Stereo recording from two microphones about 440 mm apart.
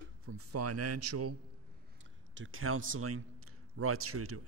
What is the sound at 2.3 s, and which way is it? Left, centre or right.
A man's voice, right.